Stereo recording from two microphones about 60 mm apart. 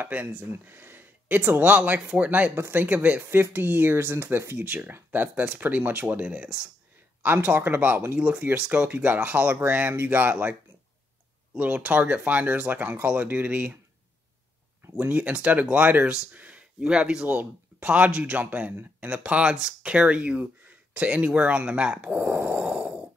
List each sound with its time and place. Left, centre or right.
0.0 s speech: right
0.5 s speech: right
2.5 s speech: right
4.6 s speech: right
7.2 s speech: right
8.2 s speech: right
15.0 s speech: right